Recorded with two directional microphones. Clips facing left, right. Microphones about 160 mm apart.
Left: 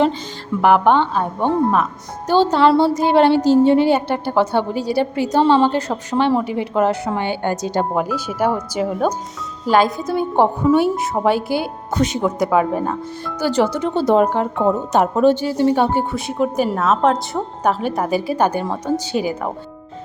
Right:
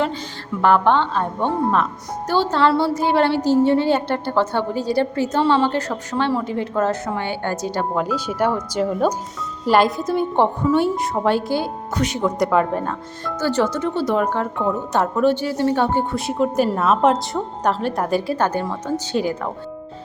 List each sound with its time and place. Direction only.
0.6 s speech: 10° left (ahead or behind)
2.2 s speech: 20° left (ahead or behind)
8.0 s a woman's voice: 5° left (ahead or behind)
11.9 s speech: 25° left (ahead or behind)
12.2 s a woman's voice: 10° left (ahead or behind)